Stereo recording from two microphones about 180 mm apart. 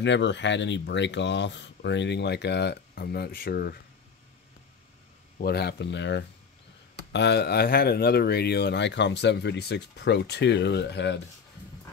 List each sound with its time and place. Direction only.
0.0 s speech: 80° left; by 3.7 s 55° left (ahead or behind)
5.4 s speech: 65° left (ahead or behind)